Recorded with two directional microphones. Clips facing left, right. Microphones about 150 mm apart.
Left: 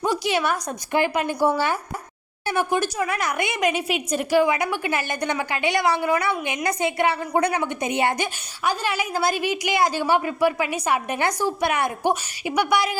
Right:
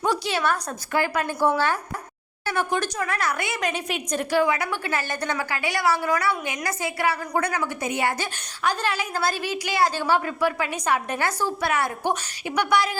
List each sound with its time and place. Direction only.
0.0 s a woman's voice: 15° left (ahead or behind)
8.6 s a woman's voice: 10° left (ahead or behind)